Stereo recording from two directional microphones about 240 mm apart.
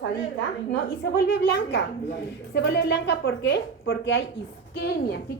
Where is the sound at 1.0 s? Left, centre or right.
Left.